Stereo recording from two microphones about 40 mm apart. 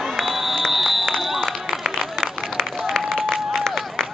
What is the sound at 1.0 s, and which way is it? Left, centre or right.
Run, centre.